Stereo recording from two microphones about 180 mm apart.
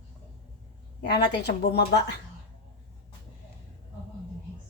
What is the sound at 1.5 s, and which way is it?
Speech, 65° left (ahead or behind).